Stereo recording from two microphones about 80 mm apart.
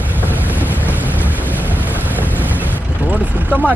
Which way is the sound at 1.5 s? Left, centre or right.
Right.